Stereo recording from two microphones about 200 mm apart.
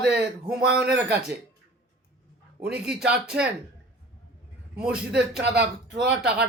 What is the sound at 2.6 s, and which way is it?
Speech, 5° right (ahead or behind).